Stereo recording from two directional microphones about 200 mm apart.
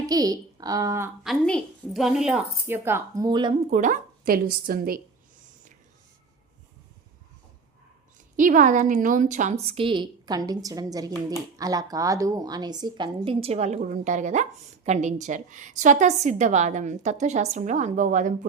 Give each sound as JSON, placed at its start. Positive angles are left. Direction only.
{"t": 0.0, "sound": "speech", "side_deg": -20}
{"t": 1.2, "sound": "a woman's voice", "side_deg": 0}
{"t": 3.7, "sound": "a woman's voice", "side_deg": -40}
{"t": 8.4, "sound": "a woman's voice", "side_deg": -40}